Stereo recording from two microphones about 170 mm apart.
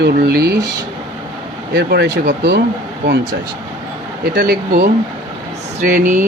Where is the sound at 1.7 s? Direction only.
70° right (ahead or behind).